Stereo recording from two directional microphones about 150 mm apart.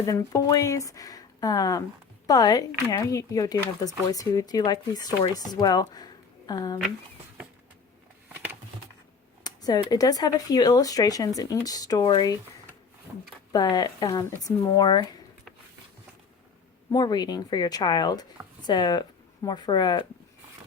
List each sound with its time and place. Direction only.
0.0 s speech: 20° left (ahead or behind)
8.3 s a sound: 15° right (ahead or behind)
9.4 s speech: 25° left (ahead or behind)
13.5 s speech: 25° left (ahead or behind)
16.9 s speech: 25° left (ahead or behind)